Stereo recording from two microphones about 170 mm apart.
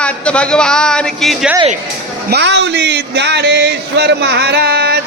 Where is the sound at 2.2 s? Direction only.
80° right.